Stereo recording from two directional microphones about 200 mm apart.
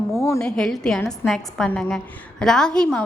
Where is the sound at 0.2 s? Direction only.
10° left (ahead or behind).